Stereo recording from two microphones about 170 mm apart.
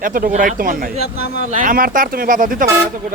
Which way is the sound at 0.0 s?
55° right (ahead or behind).